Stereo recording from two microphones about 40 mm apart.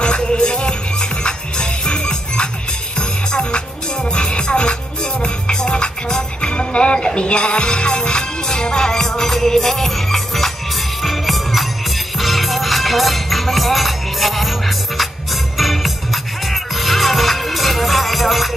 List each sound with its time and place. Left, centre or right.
0.0 s music: left; by 14.5 s centre
15.5 s music: centre